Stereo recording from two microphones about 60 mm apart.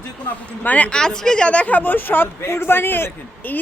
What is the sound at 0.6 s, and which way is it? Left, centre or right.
A woman's voice, left.